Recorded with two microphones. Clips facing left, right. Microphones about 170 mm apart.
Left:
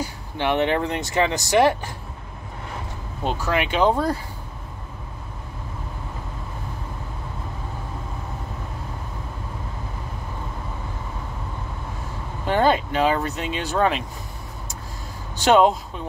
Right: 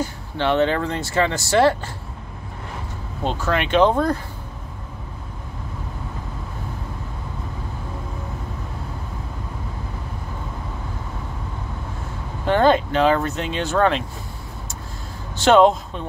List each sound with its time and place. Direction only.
0.0 s speech: 15° left (ahead or behind)
3.3 s speech: 10° left (ahead or behind)
12.4 s speech: 10° left (ahead or behind)
15.3 s speech: 15° left (ahead or behind)